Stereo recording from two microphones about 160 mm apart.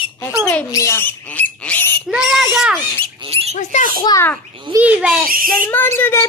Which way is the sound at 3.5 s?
45° left (ahead or behind).